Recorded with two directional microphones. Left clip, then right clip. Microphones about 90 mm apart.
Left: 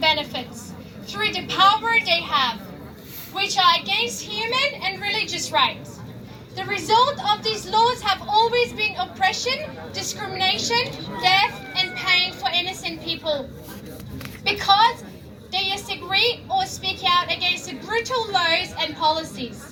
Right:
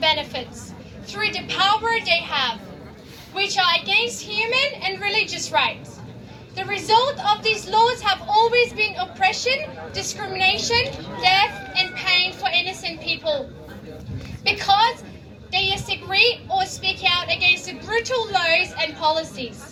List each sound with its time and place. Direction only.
0.0 s vehicle: 40° right (ahead or behind)
1.1 s a child's voice: 35° right (ahead or behind)
14.4 s a child's voice: 40° right (ahead or behind)